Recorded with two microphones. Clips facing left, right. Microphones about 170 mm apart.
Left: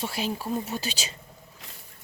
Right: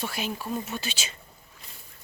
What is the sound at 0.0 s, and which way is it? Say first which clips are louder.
Speech: left 2 dB; 30° left (ahead or behind).